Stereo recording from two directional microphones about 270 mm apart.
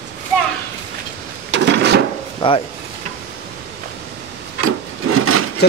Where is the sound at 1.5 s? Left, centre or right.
Right.